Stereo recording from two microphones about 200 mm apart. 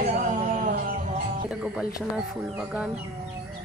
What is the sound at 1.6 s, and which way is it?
Speech, 5° right (ahead or behind).